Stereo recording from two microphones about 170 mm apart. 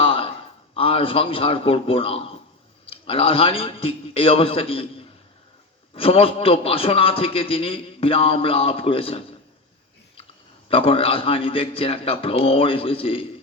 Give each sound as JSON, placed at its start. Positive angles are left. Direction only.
{"t": 0.0, "sound": "a sound", "side_deg": 30}
{"t": 2.8, "sound": "a man's voice", "side_deg": 35}
{"t": 10.7, "sound": "a man's voice", "side_deg": 35}